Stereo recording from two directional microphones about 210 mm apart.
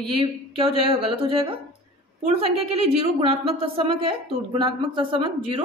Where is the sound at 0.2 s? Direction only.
25° right (ahead or behind).